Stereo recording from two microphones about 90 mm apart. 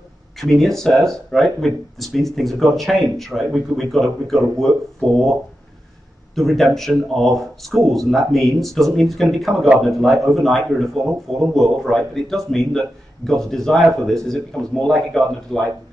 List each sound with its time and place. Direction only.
0.4 s speech: 5° left (ahead or behind)
6.3 s speech: 5° left (ahead or behind)